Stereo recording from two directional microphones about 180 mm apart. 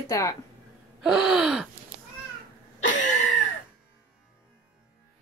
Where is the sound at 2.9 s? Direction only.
45° left (ahead or behind).